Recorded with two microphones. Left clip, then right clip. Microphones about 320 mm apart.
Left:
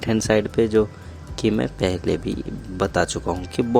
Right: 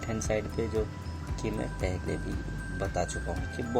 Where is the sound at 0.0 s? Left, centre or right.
Left.